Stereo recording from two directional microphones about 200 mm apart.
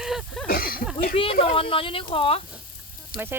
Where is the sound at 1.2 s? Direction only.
30° left (ahead or behind).